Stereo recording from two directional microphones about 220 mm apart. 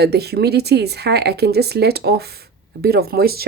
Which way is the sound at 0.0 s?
45° right (ahead or behind).